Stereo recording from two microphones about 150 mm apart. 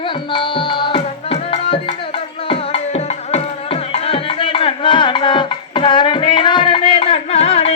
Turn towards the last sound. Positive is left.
turn(degrees=45)  # may be behind; listen again after turning